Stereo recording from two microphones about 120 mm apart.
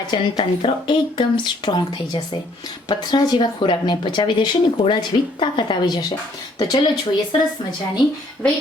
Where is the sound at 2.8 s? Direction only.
40° left (ahead or behind).